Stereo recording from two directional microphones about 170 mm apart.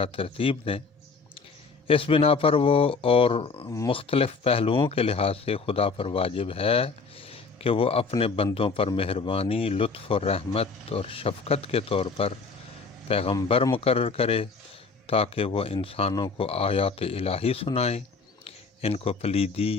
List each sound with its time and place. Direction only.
0.0 s speech: 30° left (ahead or behind)
1.9 s a man's voice: 30° left (ahead or behind)